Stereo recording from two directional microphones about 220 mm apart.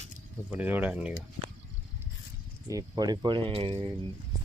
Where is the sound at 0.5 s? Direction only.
5° right (ahead or behind).